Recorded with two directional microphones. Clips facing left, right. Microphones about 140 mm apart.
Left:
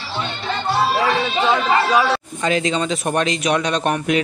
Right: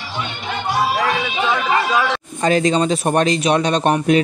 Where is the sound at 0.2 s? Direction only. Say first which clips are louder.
Left 1 dB; 15° right (ahead or behind).